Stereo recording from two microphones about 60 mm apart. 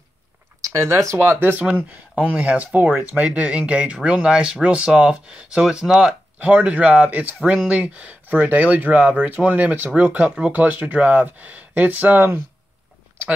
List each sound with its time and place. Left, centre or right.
0.6 s a sound: right
0.8 s speech: right
1.4 s speech: right; by 6.1 s centre
6.4 s speech: right
8.3 s speech: right